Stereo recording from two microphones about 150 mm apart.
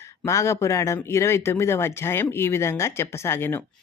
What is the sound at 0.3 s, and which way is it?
Speech, 20° left (ahead or behind).